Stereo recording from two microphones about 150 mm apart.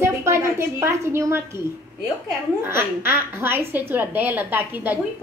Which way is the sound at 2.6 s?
15° right (ahead or behind).